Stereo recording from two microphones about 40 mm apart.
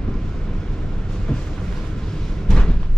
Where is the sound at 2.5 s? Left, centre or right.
Left.